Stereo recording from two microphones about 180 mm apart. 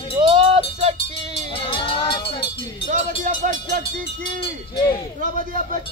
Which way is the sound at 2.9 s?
45° right (ahead or behind).